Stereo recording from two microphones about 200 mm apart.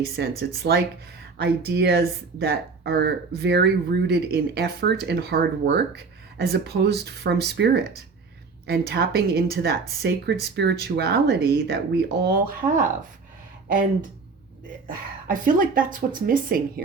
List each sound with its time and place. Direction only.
0.2 s speech: 55° right (ahead or behind)
15.3 s speech: 40° right (ahead or behind)